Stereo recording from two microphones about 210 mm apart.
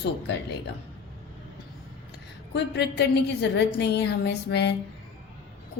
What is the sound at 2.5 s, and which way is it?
A woman's voice, 55° left (ahead or behind).